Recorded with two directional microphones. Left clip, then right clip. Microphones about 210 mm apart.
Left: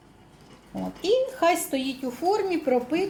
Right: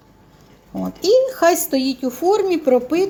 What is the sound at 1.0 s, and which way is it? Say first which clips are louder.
Speech: right 8 dB; 40° right (ahead or behind).